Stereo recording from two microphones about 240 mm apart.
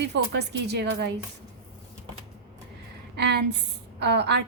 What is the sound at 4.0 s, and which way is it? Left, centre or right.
Speech, right.